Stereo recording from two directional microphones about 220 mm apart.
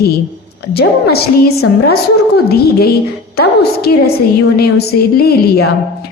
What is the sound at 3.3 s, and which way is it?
A woman's voice, 45° left (ahead or behind).